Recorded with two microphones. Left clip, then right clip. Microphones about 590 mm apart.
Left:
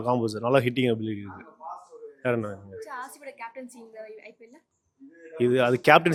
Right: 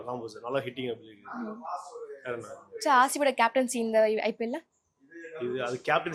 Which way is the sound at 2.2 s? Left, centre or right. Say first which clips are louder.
Left 11 dB; left.